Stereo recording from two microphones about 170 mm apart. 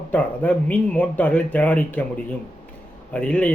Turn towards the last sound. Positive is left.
turn(degrees=10)  # may be behind; listen again after turning